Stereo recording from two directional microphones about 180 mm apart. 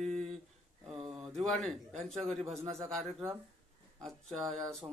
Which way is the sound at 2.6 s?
35° right (ahead or behind).